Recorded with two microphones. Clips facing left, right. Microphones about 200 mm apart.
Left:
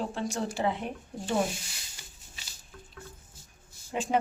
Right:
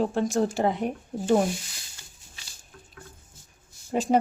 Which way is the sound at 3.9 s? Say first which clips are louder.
Right 6 dB; 40° right (ahead or behind).